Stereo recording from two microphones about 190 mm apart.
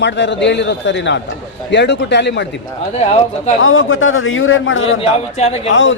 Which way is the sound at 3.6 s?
90° left.